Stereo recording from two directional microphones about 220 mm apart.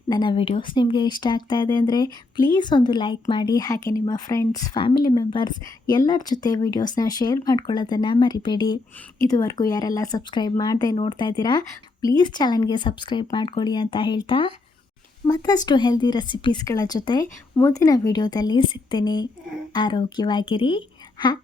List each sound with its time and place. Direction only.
0.1 s speech: 20° left (ahead or behind)